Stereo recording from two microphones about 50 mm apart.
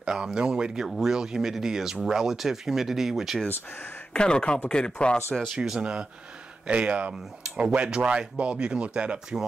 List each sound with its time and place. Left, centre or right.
0.0 s speech: centre
4.1 s speech: centre
5.8 s speech: right
7.4 s a sound: centre
7.7 s speech: right